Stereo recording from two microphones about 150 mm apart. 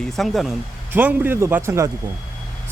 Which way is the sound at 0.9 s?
10° right (ahead or behind).